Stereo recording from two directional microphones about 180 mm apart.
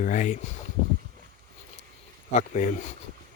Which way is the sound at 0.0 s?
45° left (ahead or behind).